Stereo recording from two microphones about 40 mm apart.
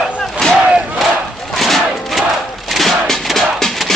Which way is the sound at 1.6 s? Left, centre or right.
Centre.